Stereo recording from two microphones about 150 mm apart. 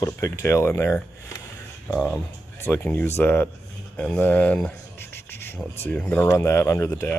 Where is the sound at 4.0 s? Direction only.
10° left (ahead or behind).